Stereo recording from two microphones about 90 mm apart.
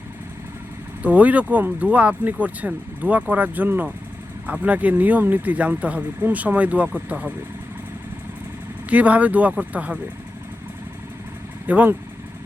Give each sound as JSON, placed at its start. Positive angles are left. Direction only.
{"t": 1.0, "sound": "speech", "side_deg": -15}
{"t": 8.9, "sound": "speech", "side_deg": -15}
{"t": 11.6, "sound": "speech", "side_deg": -20}